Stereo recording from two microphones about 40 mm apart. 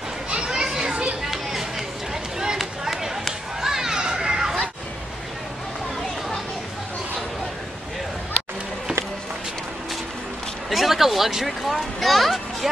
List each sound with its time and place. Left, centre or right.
0.3 s children playing: centre
1.3 s a sound: centre
2.6 s run: centre
3.6 s children playing: centre
10.7 s speech: centre